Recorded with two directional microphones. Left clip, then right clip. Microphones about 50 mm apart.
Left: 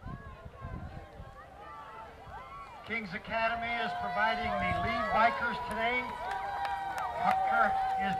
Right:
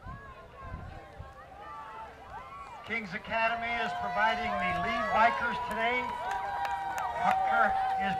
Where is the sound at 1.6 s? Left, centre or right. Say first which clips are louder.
Right 3 dB; centre.